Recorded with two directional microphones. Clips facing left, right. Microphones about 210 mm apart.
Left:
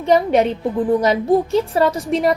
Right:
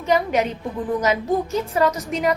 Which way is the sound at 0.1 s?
35° left (ahead or behind).